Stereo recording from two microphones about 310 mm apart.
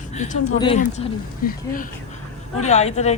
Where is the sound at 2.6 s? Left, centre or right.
Left.